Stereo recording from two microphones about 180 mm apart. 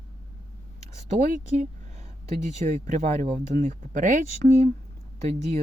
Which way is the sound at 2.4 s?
40° right (ahead or behind).